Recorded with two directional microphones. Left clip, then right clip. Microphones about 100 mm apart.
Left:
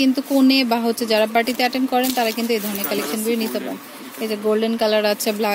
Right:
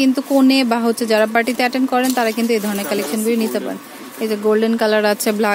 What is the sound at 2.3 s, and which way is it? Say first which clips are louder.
Speech: right 4 dB; 20° right (ahead or behind).